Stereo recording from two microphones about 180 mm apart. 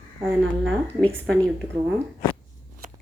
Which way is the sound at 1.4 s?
10° right (ahead or behind).